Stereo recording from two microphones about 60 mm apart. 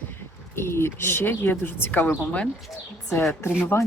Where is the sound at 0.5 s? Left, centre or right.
Left.